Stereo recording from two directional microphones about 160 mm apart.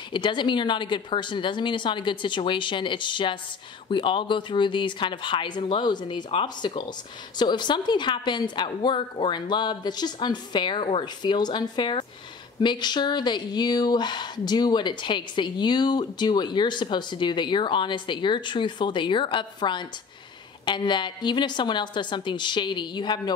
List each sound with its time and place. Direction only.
0.1 s speech: 30° left (ahead or behind)